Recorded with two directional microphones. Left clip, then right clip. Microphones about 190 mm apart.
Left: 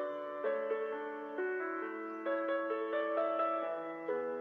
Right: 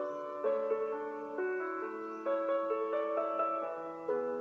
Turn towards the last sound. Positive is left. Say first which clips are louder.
# right 2 dB
turn(degrees=25)  # may be behind; listen again after turning